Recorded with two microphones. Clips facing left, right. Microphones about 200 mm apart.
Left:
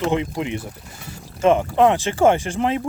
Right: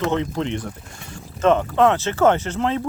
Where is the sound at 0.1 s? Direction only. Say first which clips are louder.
Even; 10° left (ahead or behind).